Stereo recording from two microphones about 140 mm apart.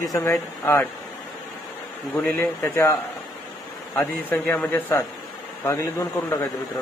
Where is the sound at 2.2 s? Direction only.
10° left (ahead or behind).